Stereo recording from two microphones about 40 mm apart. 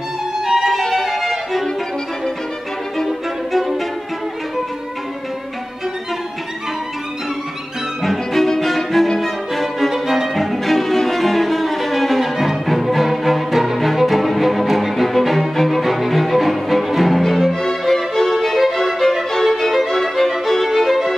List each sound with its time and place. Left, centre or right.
0.5 s music: centre
0.8 s music: centre
3.0 s violin: centre
8.0 s music: centre
9.8 s violin: centre
15.5 s music: centre
18.9 s violin: centre